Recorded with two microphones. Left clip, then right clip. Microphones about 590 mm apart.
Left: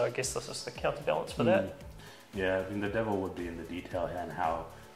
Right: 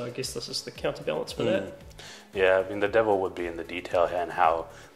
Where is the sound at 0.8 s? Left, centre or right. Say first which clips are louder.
Right 1 dB; left.